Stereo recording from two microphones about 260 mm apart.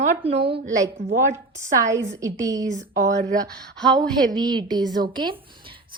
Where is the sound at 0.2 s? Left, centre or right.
Right.